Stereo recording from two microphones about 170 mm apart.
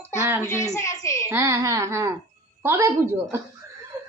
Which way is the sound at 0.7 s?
20° left (ahead or behind).